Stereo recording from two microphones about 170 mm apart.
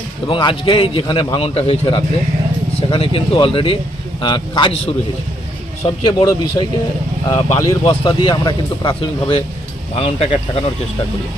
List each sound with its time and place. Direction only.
0.3 s a man's voice: 30° left (ahead or behind)
6.1 s speech: 25° left (ahead or behind)
7.3 s speech: 15° left (ahead or behind)
8.0 s a man's voice: 25° left (ahead or behind)